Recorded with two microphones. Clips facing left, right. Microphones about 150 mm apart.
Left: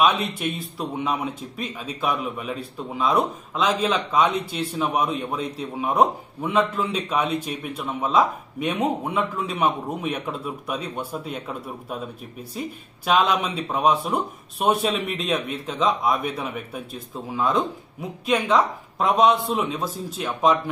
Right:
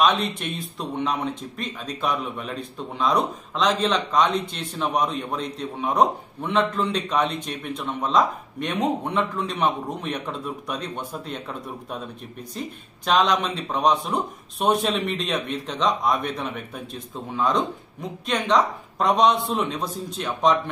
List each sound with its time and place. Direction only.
0.0 s speech: 5° left (ahead or behind)